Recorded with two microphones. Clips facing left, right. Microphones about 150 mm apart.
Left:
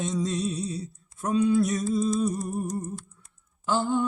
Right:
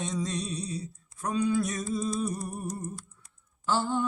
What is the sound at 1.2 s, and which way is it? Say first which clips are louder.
Speech: left 5 dB; 25° left (ahead or behind).